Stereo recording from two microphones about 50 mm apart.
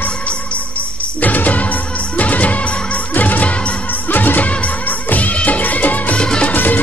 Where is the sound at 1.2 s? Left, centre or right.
Left.